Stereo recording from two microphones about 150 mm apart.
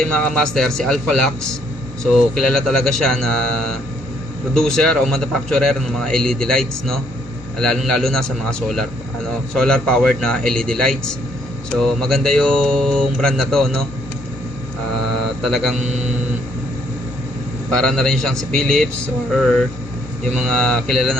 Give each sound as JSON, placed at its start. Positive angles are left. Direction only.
{"t": 0.0, "sound": "a man's voice", "side_deg": 5}
{"t": 15.4, "sound": "a man's voice", "side_deg": 0}
{"t": 17.7, "sound": "a man's voice", "side_deg": 5}